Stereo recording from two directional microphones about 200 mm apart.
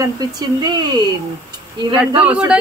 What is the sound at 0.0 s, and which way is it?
Speech, 20° right (ahead or behind).